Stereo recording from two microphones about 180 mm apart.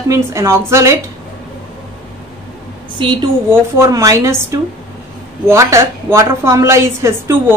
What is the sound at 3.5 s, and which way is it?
A woman's voice, 15° right (ahead or behind).